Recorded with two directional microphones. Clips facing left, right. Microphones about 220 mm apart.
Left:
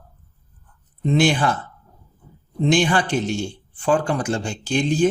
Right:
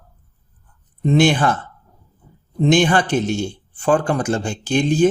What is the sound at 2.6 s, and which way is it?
Speech, 45° right (ahead or behind).